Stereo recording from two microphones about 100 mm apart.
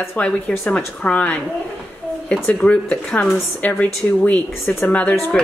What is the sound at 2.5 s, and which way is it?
Speech, 10° left (ahead or behind).